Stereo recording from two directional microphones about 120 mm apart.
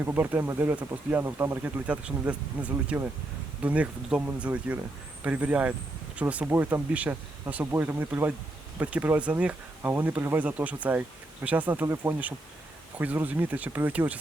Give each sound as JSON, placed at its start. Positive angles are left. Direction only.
{"t": 0.0, "sound": "speech", "side_deg": -15}